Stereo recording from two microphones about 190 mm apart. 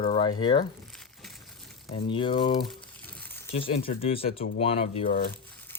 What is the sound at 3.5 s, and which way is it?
Speech, 30° left (ahead or behind).